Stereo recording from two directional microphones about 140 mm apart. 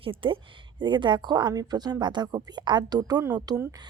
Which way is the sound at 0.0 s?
40° right (ahead or behind).